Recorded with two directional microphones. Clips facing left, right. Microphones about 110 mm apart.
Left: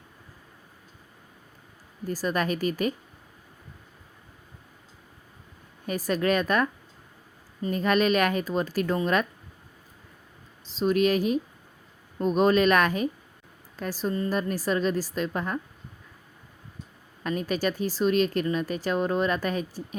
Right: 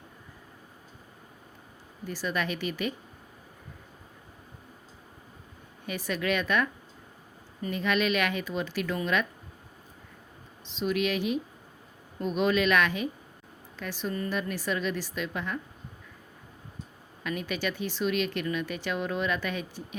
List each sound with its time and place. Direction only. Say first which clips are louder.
2.0 s speech: left 4 dB; 40° left (ahead or behind)
5.8 s speech: left 5 dB; 40° left (ahead or behind)
7.7 s speech: left 4 dB; 40° left (ahead or behind)
10.7 s speech: left 6 dB; 40° left (ahead or behind)
17.2 s speech: left 5 dB; 40° left (ahead or behind)